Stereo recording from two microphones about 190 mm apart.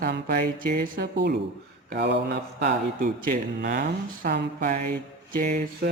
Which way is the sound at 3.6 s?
55° right (ahead or behind).